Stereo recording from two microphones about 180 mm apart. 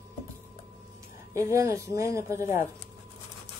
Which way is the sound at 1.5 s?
15° right (ahead or behind).